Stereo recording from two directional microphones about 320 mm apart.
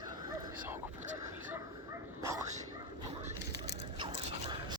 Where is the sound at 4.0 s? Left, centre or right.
Centre.